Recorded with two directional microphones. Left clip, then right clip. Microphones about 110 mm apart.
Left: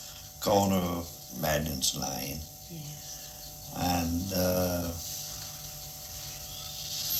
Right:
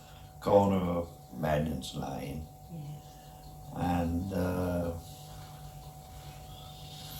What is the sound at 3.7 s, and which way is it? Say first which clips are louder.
Speech: left 2 dB; 20° left (ahead or behind).